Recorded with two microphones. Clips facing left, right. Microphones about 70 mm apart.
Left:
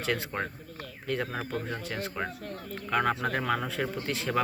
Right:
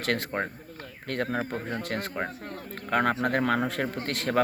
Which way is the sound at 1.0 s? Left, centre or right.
Right.